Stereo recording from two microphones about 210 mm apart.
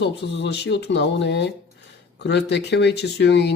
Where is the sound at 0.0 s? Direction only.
55° left (ahead or behind).